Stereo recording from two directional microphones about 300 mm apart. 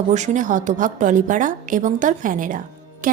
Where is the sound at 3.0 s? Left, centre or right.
Right.